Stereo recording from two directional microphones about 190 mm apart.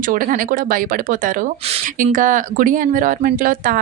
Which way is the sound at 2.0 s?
45° right (ahead or behind).